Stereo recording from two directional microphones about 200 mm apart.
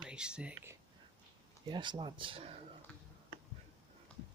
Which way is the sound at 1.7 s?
25° right (ahead or behind).